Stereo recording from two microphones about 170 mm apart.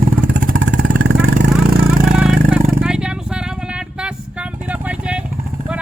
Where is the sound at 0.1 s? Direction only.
55° right (ahead or behind).